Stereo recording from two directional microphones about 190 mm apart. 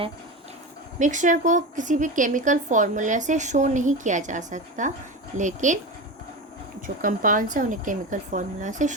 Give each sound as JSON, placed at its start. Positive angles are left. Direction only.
{"t": 0.9, "sound": "speech", "side_deg": -40}
{"t": 6.8, "sound": "speech", "side_deg": -45}